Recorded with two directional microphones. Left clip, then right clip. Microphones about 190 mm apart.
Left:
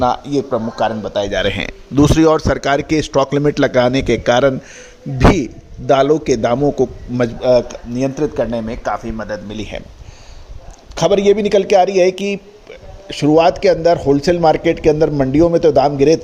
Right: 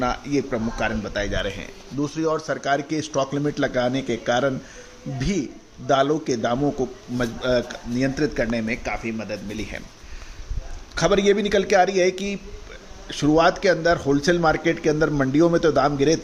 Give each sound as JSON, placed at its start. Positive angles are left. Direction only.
{"t": 0.0, "sound": "a man's voice", "side_deg": 25}
{"t": 1.3, "sound": "a man's voice", "side_deg": 40}
{"t": 1.5, "sound": "a man's voice", "side_deg": 60}
{"t": 5.9, "sound": "a man's voice", "side_deg": 40}
{"t": 7.4, "sound": "a man's voice", "side_deg": 25}
{"t": 9.5, "sound": "a man's voice", "side_deg": 40}
{"t": 10.9, "sound": "a man's voice", "side_deg": 30}